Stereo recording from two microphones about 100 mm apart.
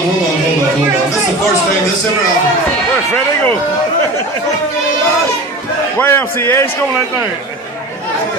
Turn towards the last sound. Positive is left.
turn(degrees=25)  # may be behind; listen again after turning